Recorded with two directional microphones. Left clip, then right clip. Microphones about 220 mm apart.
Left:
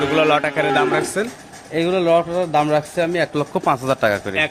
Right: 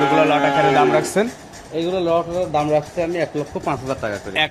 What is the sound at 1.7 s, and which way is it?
Speech, 45° left (ahead or behind).